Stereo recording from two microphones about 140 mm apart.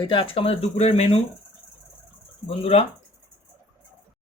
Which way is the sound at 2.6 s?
50° left (ahead or behind).